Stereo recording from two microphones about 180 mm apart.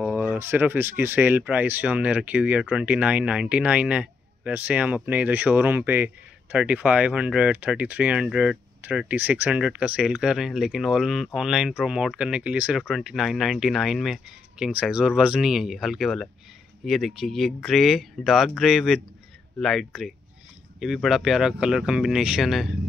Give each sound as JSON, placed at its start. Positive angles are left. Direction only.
{"t": 0.0, "sound": "speech", "side_deg": -10}